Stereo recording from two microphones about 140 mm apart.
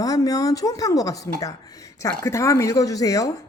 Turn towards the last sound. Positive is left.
turn(degrees=25)  # may be behind; listen again after turning